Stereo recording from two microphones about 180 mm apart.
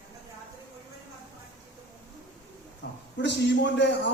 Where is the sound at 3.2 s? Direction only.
75° left (ahead or behind).